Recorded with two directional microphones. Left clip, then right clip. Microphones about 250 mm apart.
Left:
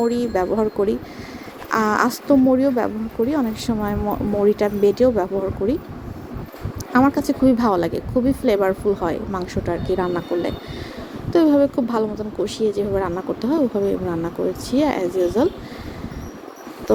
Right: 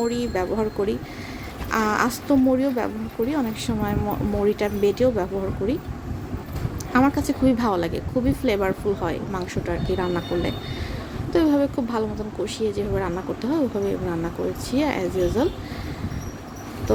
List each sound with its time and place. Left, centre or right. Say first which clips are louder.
0.0 s a woman's voice: left 4 dB; centre
7.0 s speech: left 3 dB; centre
7.3 s a woman's voice: left 4 dB; centre